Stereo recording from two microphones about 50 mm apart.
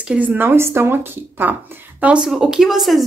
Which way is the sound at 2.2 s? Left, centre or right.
Centre.